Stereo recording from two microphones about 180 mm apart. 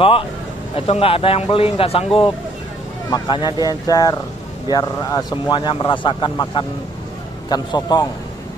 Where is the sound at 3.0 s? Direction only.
25° left (ahead or behind).